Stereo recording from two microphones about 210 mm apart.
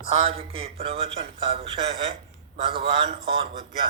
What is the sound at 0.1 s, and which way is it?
Mantra, 30° right (ahead or behind).